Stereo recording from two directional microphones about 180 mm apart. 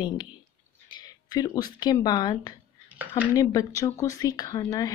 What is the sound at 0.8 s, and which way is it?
A woman's voice, 20° left (ahead or behind).